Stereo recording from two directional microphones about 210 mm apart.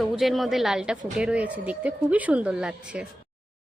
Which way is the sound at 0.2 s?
Centre (ahead or behind).